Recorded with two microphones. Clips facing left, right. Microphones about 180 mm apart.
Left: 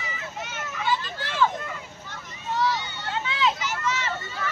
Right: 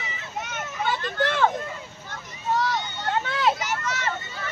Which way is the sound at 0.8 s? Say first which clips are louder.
Right 3 dB; 60° right (ahead or behind).